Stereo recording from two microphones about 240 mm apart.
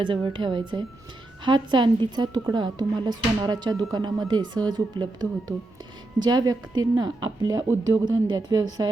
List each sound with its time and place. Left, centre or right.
0.0 s a woman's voice: centre